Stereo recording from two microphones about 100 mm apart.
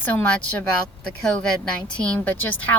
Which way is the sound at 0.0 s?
15° left (ahead or behind).